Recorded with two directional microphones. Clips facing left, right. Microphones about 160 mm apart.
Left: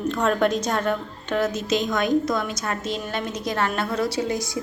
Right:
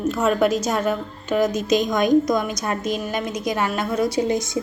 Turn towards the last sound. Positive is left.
turn(degrees=-20)  # may be behind; listen again after turning